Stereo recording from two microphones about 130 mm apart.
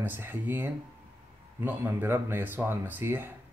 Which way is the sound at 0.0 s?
15° right (ahead or behind).